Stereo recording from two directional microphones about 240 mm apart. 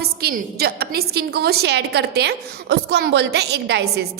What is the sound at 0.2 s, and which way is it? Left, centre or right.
A woman's voice, right.